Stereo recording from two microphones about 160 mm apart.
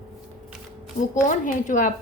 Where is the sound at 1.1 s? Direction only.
55° left (ahead or behind).